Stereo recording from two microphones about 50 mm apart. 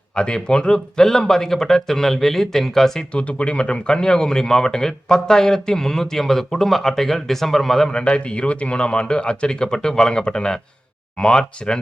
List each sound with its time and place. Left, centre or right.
0.2 s speech: centre
3.2 s speech: left; by 7.9 s centre
7.9 s a man's voice: centre